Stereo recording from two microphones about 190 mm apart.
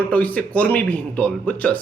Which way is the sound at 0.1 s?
10° left (ahead or behind).